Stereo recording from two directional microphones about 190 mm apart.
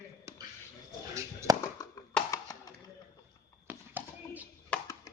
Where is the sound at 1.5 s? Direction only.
20° right (ahead or behind).